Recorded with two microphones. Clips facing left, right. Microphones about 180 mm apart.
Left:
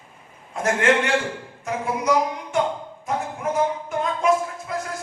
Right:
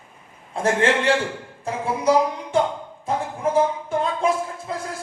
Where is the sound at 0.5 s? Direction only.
30° right (ahead or behind).